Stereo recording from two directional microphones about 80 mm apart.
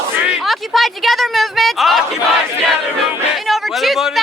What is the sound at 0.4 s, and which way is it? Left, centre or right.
Speech, centre.